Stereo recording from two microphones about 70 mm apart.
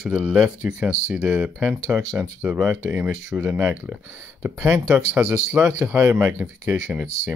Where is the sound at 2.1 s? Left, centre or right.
Right.